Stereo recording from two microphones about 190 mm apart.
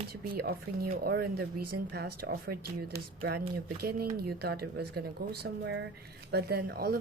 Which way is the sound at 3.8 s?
55° right (ahead or behind).